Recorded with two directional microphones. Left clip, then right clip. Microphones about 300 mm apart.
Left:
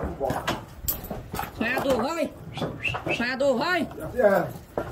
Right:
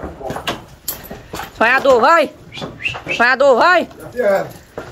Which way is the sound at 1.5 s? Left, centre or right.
Centre.